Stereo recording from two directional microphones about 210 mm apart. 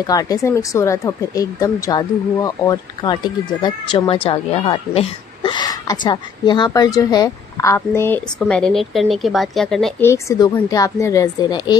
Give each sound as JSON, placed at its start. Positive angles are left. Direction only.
{"t": 0.0, "sound": "a woman's voice", "side_deg": 15}
{"t": 10.0, "sound": "speech", "side_deg": 15}